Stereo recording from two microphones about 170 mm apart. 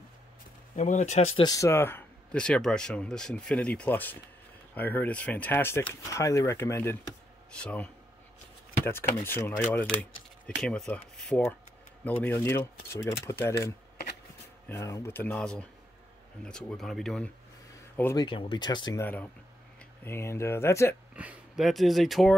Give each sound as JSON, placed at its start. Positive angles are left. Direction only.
{"t": 0.7, "sound": "speech", "side_deg": 45}
{"t": 1.4, "sound": "speech", "side_deg": 20}
{"t": 10.5, "sound": "speech", "side_deg": 0}
{"t": 18.1, "sound": "speech", "side_deg": 30}
{"t": 21.2, "sound": "speech", "side_deg": -5}